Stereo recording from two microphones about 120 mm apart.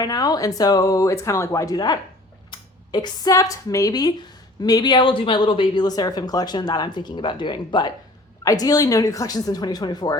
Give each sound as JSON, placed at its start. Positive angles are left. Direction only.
{"t": 0.0, "sound": "speech", "side_deg": 30}